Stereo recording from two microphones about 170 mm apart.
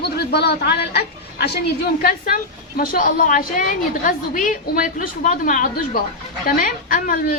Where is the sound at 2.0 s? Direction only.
60° left (ahead or behind).